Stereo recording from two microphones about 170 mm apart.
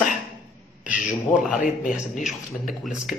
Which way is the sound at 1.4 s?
50° left (ahead or behind).